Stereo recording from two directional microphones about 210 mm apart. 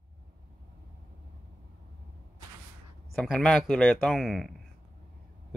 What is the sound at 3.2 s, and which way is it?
Speech, centre (ahead or behind).